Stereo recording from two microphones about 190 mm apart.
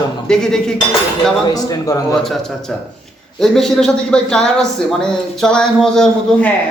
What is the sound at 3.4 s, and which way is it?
Speech, centre (ahead or behind).